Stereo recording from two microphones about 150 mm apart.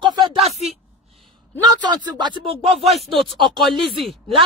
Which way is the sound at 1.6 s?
30° right (ahead or behind).